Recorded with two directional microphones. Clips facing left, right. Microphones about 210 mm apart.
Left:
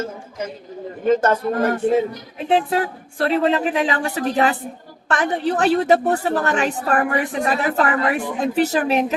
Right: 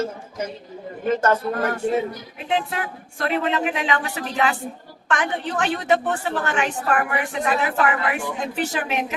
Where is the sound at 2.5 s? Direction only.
35° left (ahead or behind).